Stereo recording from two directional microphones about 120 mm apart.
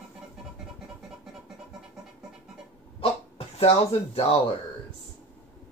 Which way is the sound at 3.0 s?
55° left (ahead or behind).